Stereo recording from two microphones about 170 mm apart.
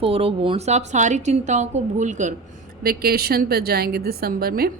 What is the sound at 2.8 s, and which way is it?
A woman's voice, 65° right (ahead or behind).